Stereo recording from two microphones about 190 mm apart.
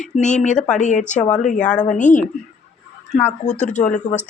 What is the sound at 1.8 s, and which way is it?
Speech, 40° left (ahead or behind).